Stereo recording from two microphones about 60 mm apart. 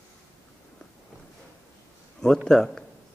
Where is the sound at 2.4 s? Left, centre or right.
Centre.